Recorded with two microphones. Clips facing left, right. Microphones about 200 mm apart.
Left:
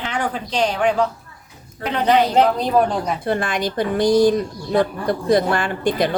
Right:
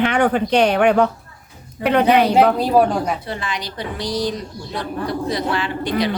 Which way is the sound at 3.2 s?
50° left (ahead or behind).